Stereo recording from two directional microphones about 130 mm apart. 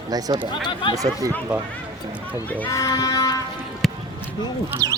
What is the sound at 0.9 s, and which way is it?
Speech, 25° right (ahead or behind).